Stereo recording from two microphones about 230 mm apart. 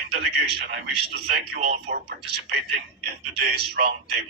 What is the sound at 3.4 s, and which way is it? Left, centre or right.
Speech, right.